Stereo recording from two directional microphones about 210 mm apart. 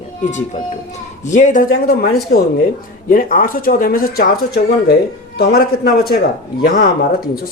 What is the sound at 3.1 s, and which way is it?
Speech, 40° left (ahead or behind).